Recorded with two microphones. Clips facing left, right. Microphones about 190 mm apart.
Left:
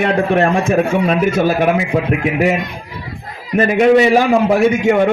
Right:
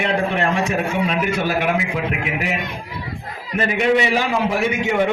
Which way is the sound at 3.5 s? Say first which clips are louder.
Left 7 dB; 45° left (ahead or behind).